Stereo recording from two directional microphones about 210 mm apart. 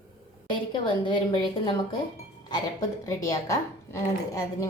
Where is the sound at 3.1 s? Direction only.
15° left (ahead or behind).